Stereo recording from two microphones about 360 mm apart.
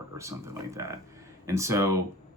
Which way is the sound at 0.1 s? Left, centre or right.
Centre.